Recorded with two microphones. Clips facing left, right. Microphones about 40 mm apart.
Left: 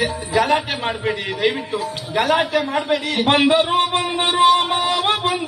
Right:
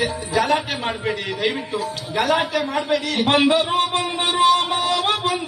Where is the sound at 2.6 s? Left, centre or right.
Centre.